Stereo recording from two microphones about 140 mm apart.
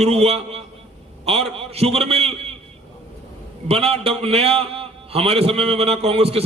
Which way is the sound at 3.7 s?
45° right (ahead or behind).